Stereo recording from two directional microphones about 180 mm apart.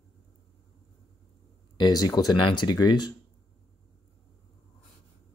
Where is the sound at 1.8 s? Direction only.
20° left (ahead or behind).